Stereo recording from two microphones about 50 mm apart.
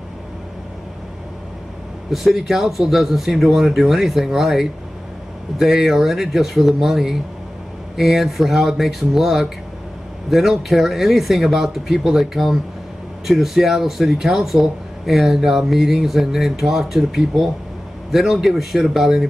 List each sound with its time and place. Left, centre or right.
2.1 s speech: centre